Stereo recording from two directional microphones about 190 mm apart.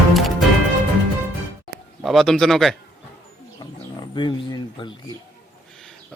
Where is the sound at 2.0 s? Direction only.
Centre (ahead or behind).